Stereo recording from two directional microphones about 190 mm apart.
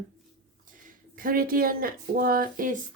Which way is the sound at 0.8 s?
50° right (ahead or behind).